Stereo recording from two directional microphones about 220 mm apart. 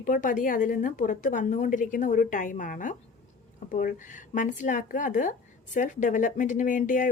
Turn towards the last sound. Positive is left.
turn(degrees=35)  # may be behind; listen again after turning